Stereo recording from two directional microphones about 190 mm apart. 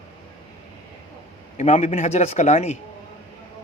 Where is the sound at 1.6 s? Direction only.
35° left (ahead or behind).